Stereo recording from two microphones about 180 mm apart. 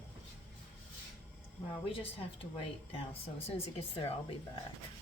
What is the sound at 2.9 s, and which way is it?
Speech, 30° left (ahead or behind).